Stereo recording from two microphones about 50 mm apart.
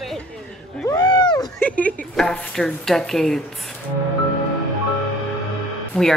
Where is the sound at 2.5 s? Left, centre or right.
Centre.